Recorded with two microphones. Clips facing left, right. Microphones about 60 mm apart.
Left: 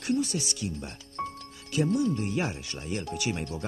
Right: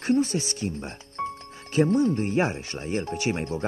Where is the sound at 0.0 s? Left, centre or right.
Right.